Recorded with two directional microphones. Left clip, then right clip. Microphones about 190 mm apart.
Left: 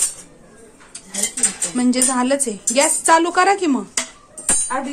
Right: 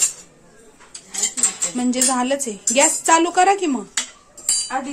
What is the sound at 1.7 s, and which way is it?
A woman's voice, 15° right (ahead or behind).